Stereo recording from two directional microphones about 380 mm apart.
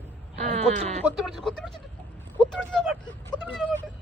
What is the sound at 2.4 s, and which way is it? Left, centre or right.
Vehicle, centre.